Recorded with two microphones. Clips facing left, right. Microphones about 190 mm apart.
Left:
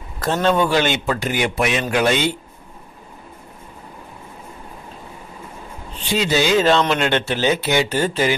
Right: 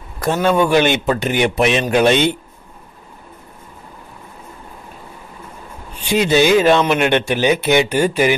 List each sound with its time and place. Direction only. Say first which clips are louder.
0.2 s a man's voice: right 2 dB; 10° right (ahead or behind)
5.9 s speech: right 5 dB; 15° right (ahead or behind)